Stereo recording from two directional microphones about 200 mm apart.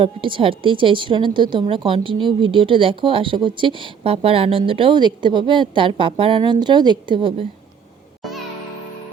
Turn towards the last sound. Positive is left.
turn(degrees=-25)  # may be behind; listen again after turning